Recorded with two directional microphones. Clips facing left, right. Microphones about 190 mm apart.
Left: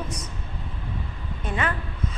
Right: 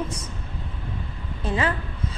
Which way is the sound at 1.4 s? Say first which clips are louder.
Right 3 dB; 30° right (ahead or behind).